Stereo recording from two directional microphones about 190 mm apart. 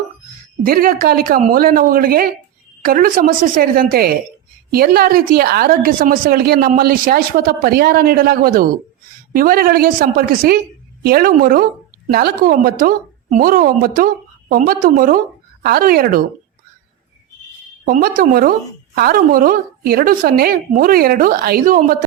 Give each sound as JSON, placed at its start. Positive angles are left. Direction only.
{"t": 0.6, "sound": "a woman's voice", "side_deg": -50}
{"t": 17.8, "sound": "a woman's voice", "side_deg": -50}